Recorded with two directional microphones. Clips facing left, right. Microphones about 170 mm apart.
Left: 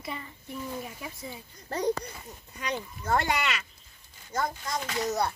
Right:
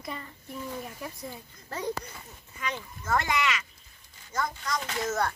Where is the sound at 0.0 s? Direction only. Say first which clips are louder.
Even; 5° left (ahead or behind).